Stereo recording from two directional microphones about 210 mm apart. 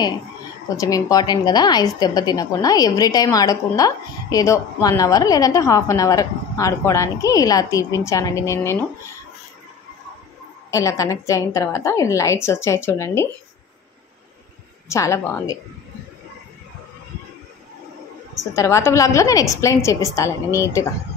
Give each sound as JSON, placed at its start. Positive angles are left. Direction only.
{"t": 0.7, "sound": "a woman's voice", "side_deg": 15}
{"t": 10.7, "sound": "a woman's voice", "side_deg": 15}
{"t": 14.9, "sound": "a woman's voice", "side_deg": 15}
{"t": 18.5, "sound": "a woman's voice", "side_deg": 15}